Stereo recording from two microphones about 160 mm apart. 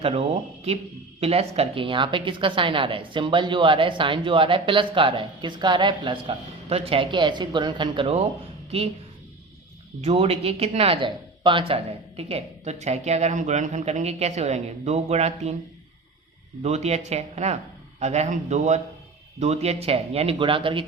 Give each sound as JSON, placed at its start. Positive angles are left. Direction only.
{"t": 0.0, "sound": "a woman's voice", "side_deg": -35}
{"t": 10.0, "sound": "speech", "side_deg": -40}
{"t": 16.6, "sound": "a woman's voice", "side_deg": -45}